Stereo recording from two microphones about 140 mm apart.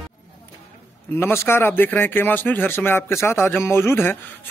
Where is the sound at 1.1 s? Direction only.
15° left (ahead or behind).